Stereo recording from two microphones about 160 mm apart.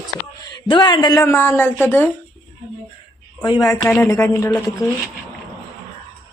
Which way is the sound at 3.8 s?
15° left (ahead or behind).